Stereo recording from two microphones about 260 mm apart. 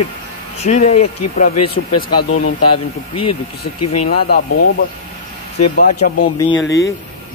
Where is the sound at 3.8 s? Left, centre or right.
Left.